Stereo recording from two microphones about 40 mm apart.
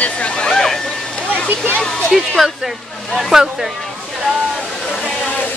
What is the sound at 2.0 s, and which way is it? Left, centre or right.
Speech, centre.